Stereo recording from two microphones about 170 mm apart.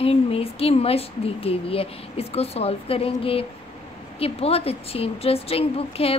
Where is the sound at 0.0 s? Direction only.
35° left (ahead or behind).